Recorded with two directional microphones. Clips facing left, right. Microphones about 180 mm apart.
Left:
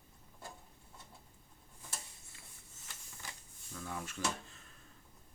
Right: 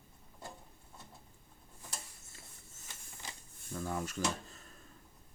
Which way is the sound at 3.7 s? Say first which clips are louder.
Right 6 dB; 40° right (ahead or behind).